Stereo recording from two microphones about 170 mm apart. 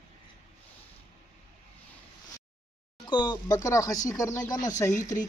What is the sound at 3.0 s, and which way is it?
A man's voice, 25° left (ahead or behind).